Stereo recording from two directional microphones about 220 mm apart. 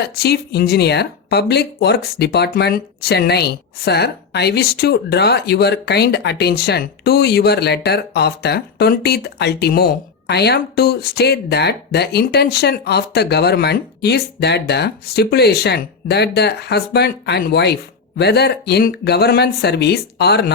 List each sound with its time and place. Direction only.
0.0 s speech: 45° left (ahead or behind)